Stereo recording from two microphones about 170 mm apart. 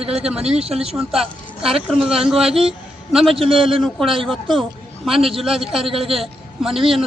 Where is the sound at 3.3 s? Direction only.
30° right (ahead or behind).